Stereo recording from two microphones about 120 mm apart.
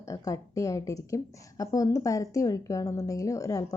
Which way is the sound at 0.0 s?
25° left (ahead or behind).